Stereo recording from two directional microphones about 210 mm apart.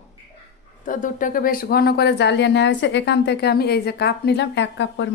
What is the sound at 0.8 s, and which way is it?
Speech, 40° left (ahead or behind).